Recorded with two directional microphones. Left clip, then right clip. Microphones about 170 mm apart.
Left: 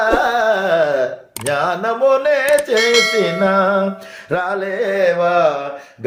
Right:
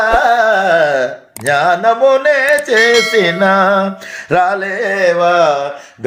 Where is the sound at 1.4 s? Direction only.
10° right (ahead or behind).